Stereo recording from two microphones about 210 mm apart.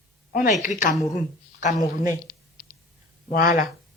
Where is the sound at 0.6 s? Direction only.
40° left (ahead or behind).